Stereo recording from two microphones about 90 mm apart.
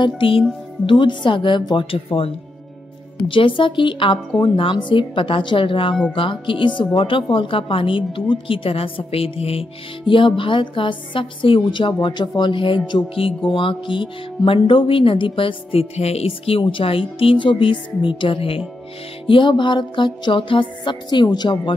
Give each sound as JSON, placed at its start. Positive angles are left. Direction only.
{"t": 0.0, "sound": "a woman's voice", "side_deg": 75}
{"t": 0.8, "sound": "music", "side_deg": 65}
{"t": 3.3, "sound": "a woman's voice", "side_deg": 75}
{"t": 17.2, "sound": "a woman's voice", "side_deg": 75}
{"t": 19.2, "sound": "music", "side_deg": 65}